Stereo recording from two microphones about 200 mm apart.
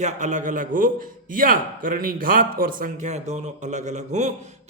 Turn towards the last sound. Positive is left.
turn(degrees=-35)  # may be behind; listen again after turning